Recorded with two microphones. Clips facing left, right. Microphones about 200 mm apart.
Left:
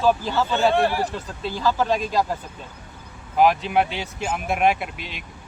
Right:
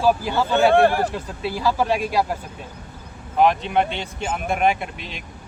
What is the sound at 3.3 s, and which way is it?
Speech, 5° left (ahead or behind).